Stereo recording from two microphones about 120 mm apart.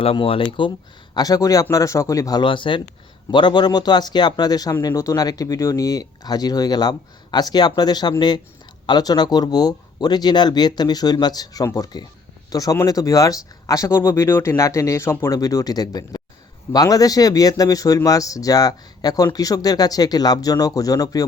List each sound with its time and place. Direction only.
0.0 s speech: 50° left (ahead or behind)
1.1 s speech: 30° left (ahead or behind)
2.4 s speech: 45° left (ahead or behind)